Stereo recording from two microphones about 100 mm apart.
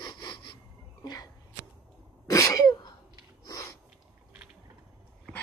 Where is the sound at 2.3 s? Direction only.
35° left (ahead or behind).